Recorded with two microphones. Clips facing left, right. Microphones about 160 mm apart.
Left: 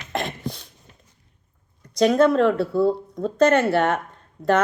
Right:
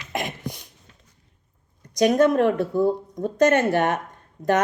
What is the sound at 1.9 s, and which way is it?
A woman's voice, 15° right (ahead or behind).